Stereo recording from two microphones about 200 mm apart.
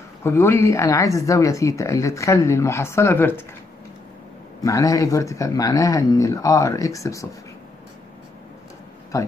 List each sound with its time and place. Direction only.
0.2 s speech: 15° left (ahead or behind)
4.6 s speech: 15° left (ahead or behind)
9.1 s speech: 15° left (ahead or behind)